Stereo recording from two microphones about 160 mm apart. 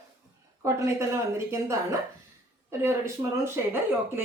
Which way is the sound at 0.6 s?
20° right (ahead or behind).